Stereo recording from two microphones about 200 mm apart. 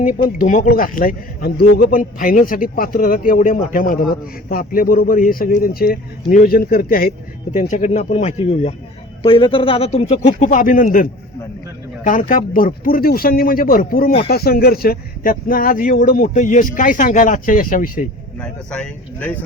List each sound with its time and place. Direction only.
0.0 s a man's voice: 40° left (ahead or behind)
18.3 s speech: 5° left (ahead or behind)